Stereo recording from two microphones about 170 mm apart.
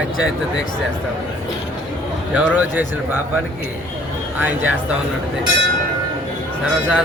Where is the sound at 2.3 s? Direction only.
10° right (ahead or behind).